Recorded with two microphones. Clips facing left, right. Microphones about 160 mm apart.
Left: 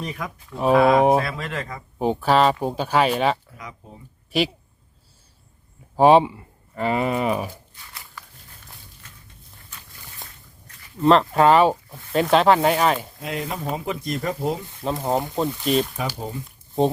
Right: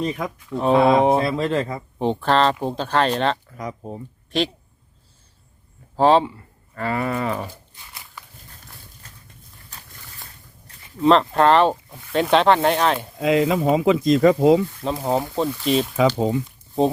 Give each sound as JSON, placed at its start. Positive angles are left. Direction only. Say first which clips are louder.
{"t": 0.0, "sound": "speech", "louder": "right 6 dB", "side_deg": -25}
{"t": 2.0, "sound": "speech", "louder": "left 1 dB", "side_deg": 5}
{"t": 3.6, "sound": "speech", "louder": "right 9 dB", "side_deg": -45}
{"t": 4.3, "sound": "speech", "louder": "even", "side_deg": 5}
{"t": 6.0, "sound": "speech", "louder": "left 2 dB", "side_deg": 15}
{"t": 9.0, "sound": "a sound", "louder": "even", "side_deg": -40}
{"t": 11.0, "sound": "speech", "louder": "even", "side_deg": 0}
{"t": 13.2, "sound": "speech", "louder": "right 13 dB", "side_deg": -90}
{"t": 14.8, "sound": "speech", "louder": "right 1 dB", "side_deg": 0}
{"t": 16.0, "sound": "speech", "louder": "right 10 dB", "side_deg": -90}